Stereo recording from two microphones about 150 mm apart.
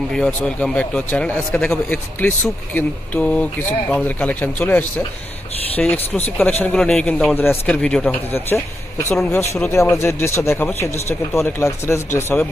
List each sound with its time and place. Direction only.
0.1 s speech: 5° left (ahead or behind)